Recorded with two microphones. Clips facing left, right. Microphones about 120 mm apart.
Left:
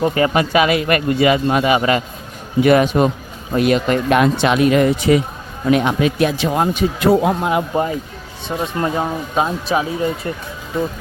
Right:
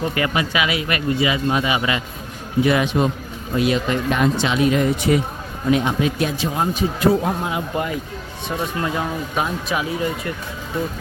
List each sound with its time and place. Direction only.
0.0 s speech: 30° left (ahead or behind)
0.3 s speech: 45° left (ahead or behind)
2.6 s speech: 60° left (ahead or behind); by 5.2 s 90° left
5.7 s a man's voice: 75° left (ahead or behind)
8.4 s speech: 30° left (ahead or behind)